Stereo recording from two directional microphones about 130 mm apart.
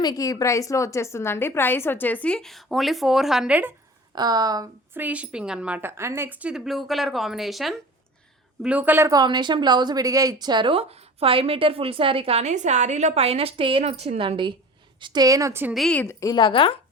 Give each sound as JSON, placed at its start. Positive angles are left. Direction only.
{"t": 0.0, "sound": "a woman's voice", "side_deg": 30}
{"t": 4.1, "sound": "a woman's voice", "side_deg": -30}
{"t": 4.9, "sound": "a woman's voice", "side_deg": -10}
{"t": 8.6, "sound": "a woman's voice", "side_deg": -10}
{"t": 9.0, "sound": "a woman's voice", "side_deg": -30}
{"t": 15.7, "sound": "a woman's voice", "side_deg": 0}
{"t": 16.0, "sound": "a woman's voice", "side_deg": 20}
{"t": 16.3, "sound": "speech", "side_deg": 40}